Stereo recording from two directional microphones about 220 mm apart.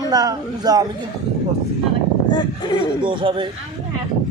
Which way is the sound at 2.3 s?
20° left (ahead or behind).